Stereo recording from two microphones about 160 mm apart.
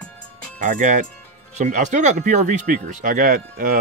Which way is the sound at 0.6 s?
50° right (ahead or behind).